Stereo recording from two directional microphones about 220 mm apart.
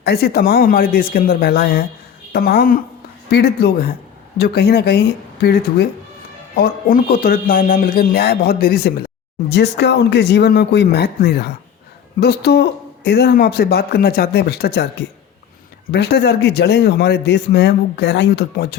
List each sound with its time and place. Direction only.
0.0 s a man's voice: 45° left (ahead or behind)
15.9 s a man's voice: 50° left (ahead or behind)